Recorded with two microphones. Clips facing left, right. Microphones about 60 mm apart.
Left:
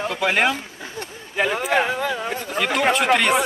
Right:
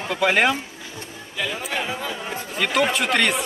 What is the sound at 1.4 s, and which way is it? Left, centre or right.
Speech, left.